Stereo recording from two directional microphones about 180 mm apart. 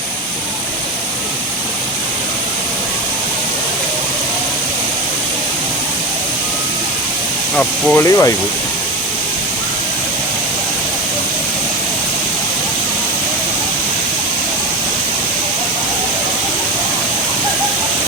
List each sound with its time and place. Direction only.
7.5 s speech: 5° left (ahead or behind)
8.0 s speech: 15° left (ahead or behind)